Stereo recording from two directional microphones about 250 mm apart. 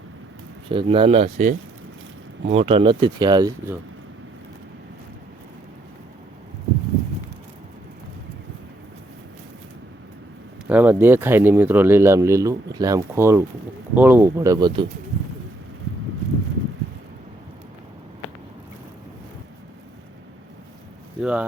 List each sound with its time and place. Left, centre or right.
0.7 s speech: right
10.7 s speech: centre
21.2 s speech: centre